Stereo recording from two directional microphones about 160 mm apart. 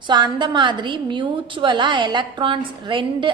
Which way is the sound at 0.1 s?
30° right (ahead or behind).